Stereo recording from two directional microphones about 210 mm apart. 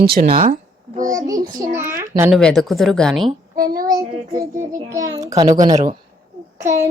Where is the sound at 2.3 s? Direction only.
Centre (ahead or behind).